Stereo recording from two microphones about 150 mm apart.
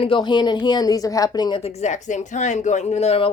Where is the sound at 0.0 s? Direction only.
30° left (ahead or behind).